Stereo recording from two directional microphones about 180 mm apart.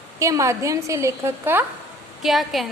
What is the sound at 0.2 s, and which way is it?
A woman's voice, 15° right (ahead or behind).